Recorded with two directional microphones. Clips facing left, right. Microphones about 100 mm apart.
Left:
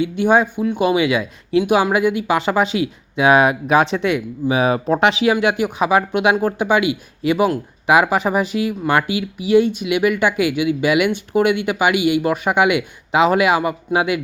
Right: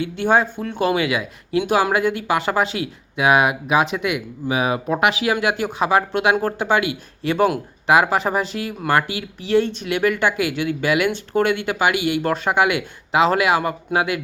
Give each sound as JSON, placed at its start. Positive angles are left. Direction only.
{"t": 0.0, "sound": "speech", "side_deg": 15}